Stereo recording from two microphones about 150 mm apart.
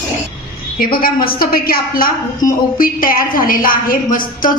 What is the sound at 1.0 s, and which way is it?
A woman's voice, 80° left.